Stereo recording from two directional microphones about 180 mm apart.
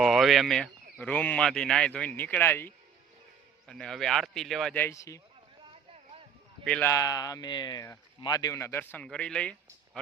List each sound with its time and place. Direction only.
0.0 s speech: centre (ahead or behind); by 5.2 s 15° left (ahead or behind)
6.7 s speech: 10° left (ahead or behind)